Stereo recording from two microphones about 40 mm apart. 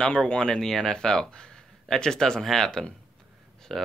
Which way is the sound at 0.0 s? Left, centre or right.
Left.